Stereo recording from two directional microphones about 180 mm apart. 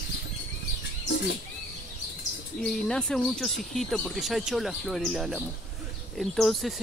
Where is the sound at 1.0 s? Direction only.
70° left (ahead or behind).